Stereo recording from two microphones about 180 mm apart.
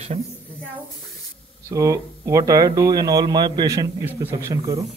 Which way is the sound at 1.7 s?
15° right (ahead or behind).